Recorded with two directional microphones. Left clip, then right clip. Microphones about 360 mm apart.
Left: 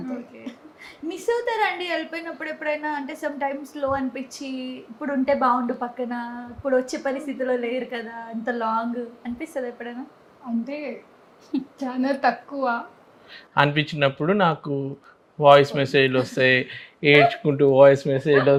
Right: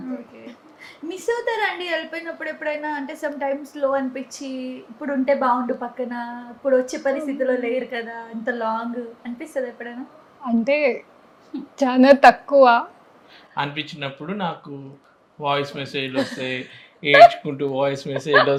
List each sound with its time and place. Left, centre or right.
0.8 s a woman's voice: centre
10.7 s a woman's voice: right
13.5 s speech: left